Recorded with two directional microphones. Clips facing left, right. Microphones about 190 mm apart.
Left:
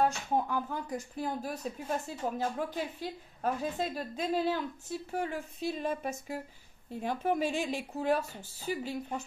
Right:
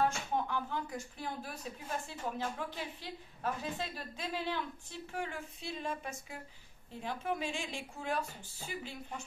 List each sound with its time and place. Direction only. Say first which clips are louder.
0.0 s a woman's voice: left 4 dB; 40° left (ahead or behind)